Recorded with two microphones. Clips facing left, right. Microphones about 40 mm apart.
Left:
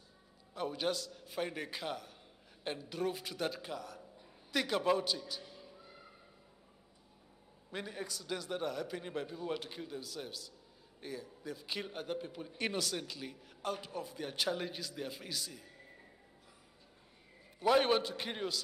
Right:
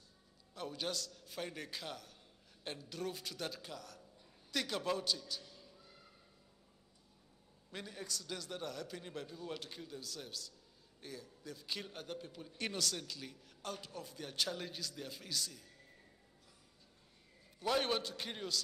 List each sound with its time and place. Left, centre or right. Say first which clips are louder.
0.6 s a man's voice: left 6 dB; centre
7.7 s a man's voice: left 4 dB; centre
17.6 s a man's voice: left 6 dB; centre